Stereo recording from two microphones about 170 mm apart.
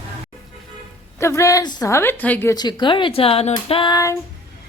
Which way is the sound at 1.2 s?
15° left (ahead or behind).